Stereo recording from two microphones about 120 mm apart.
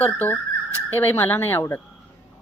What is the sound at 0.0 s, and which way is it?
A woman's voice, 15° left (ahead or behind).